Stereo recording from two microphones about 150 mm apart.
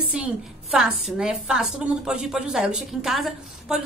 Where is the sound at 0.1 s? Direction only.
5° right (ahead or behind).